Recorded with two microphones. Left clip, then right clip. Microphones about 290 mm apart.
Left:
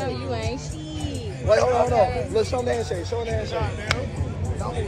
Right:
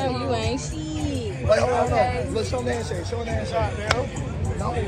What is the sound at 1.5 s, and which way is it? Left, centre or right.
A man's voice, left.